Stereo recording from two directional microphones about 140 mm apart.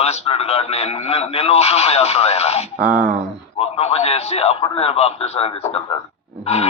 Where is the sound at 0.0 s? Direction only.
45° left (ahead or behind).